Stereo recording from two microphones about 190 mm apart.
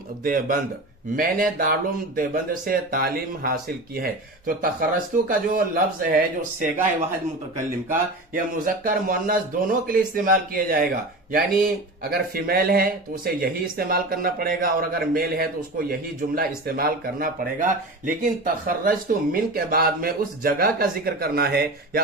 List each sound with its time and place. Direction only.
0.2 s speech: 45° right (ahead or behind)
7.9 s speech: 45° right (ahead or behind)